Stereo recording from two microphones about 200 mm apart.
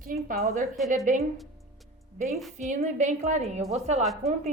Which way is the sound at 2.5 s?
35° right (ahead or behind).